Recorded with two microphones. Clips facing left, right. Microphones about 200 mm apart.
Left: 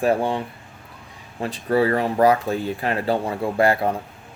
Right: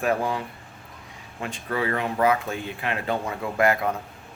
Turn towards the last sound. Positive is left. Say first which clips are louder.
# left 3 dB
turn(degrees=30)  # may be behind; listen again after turning